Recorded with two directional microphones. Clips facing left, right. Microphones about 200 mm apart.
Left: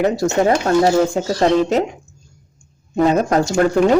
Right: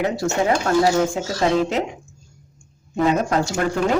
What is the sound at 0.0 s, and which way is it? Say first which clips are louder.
A woman's voice: left 5 dB; 40° left (ahead or behind).